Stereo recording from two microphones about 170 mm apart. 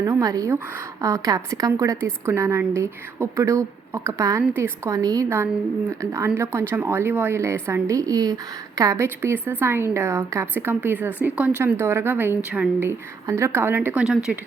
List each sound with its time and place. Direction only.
0.0 s a woman's voice: 20° right (ahead or behind); by 14.3 s 5° right (ahead or behind)